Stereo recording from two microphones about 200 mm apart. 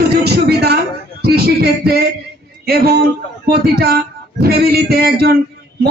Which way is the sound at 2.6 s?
50° right (ahead or behind).